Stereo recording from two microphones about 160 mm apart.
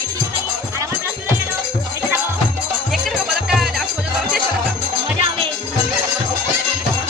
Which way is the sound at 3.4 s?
Centre (ahead or behind).